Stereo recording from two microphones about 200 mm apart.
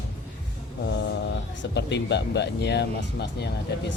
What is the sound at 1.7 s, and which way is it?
Speech, 60° left (ahead or behind).